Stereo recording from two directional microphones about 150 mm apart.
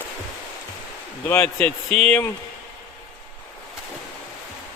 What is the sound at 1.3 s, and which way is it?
Speech, 15° left (ahead or behind).